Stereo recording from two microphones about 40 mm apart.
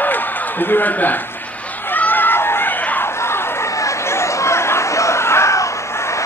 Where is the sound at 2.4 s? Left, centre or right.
Left.